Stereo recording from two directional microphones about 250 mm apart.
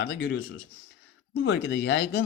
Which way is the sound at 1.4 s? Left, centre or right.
Left.